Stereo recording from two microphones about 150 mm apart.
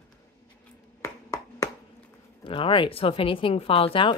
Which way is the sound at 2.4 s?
35° left (ahead or behind).